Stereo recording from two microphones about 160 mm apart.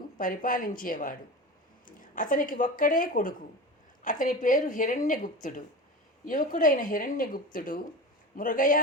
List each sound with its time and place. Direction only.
0.2 s a woman's voice: 55° left (ahead or behind)